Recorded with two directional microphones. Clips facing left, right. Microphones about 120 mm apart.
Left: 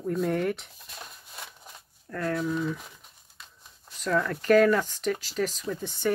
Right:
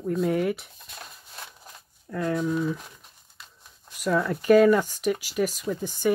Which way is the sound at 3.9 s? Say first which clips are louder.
Right 2 dB; 10° right (ahead or behind).